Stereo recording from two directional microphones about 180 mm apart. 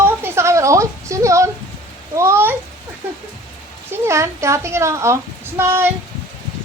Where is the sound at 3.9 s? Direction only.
15° right (ahead or behind).